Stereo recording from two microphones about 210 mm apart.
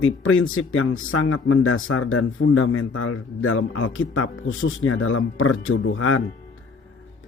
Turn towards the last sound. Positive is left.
turn(degrees=80)